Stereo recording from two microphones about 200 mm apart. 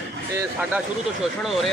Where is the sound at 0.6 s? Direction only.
5° right (ahead or behind).